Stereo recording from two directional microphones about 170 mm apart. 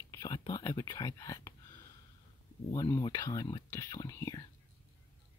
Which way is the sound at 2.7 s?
20° left (ahead or behind).